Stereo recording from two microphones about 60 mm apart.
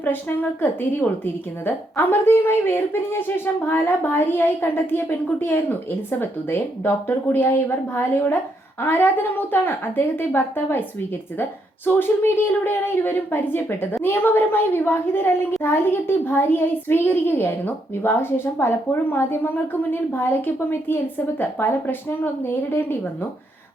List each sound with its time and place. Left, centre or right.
0.6 s a woman's voice: left
11.9 s a woman's voice: left